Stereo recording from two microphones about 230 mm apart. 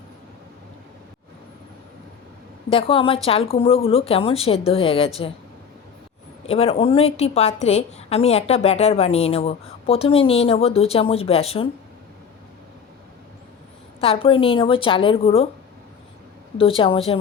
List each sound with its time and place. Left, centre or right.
2.6 s a woman's voice: left
6.5 s a woman's voice: left
14.0 s a woman's voice: left
16.6 s a woman's voice: left